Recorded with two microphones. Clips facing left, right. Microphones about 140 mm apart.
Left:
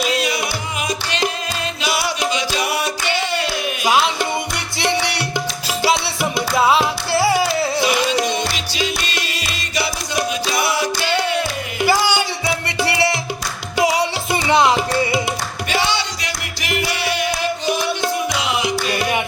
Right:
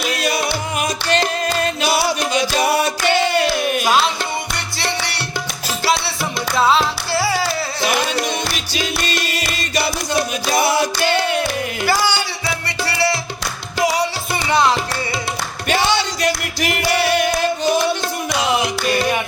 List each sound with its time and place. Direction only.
0.8 s music: 50° right (ahead or behind)
3.1 s a sound: 50° right (ahead or behind)
4.8 s music: 15° left (ahead or behind)
6.6 s music: 15° left (ahead or behind)
9.3 s music: 50° right (ahead or behind)
11.9 s music: 15° left (ahead or behind)
15.7 s music: 50° right (ahead or behind)